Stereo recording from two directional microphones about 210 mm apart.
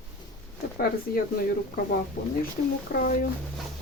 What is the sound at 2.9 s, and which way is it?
Speech, 45° left (ahead or behind).